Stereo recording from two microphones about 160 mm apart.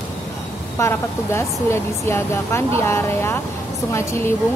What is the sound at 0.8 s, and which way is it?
A woman's voice, 15° left (ahead or behind).